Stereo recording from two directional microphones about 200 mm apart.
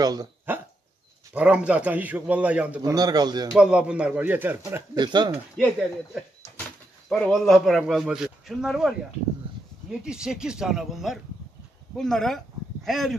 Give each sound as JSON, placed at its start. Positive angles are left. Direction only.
{"t": 0.0, "sound": "speech", "side_deg": -20}
{"t": 1.3, "sound": "a man's voice", "side_deg": -5}
{"t": 2.8, "sound": "a man's voice", "side_deg": -20}
{"t": 3.5, "sound": "a man's voice", "side_deg": -5}
{"t": 4.9, "sound": "a man's voice", "side_deg": -20}
{"t": 7.1, "sound": "a man's voice", "side_deg": 5}